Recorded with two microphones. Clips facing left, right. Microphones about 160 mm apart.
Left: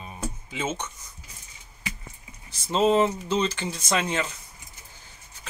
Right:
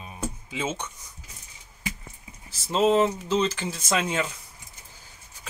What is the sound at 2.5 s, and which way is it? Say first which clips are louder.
Speech: even; centre (ahead or behind).